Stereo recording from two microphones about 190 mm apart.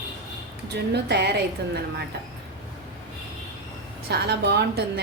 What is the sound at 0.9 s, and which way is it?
Speech, 60° right (ahead or behind).